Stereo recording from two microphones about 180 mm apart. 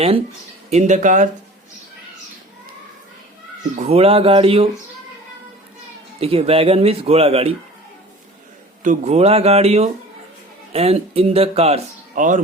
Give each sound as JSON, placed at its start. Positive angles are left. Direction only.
{"t": 0.7, "sound": "speech", "side_deg": -40}
{"t": 3.8, "sound": "speech", "side_deg": -35}
{"t": 6.1, "sound": "speech", "side_deg": -35}
{"t": 8.8, "sound": "speech", "side_deg": -40}